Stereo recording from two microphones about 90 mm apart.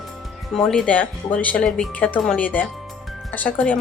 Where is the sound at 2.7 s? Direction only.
Centre (ahead or behind).